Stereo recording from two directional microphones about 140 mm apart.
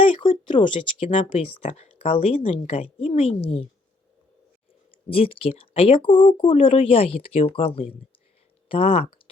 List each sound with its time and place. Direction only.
0.0 s a woman's voice: 35° left (ahead or behind)
5.0 s speech: 40° left (ahead or behind)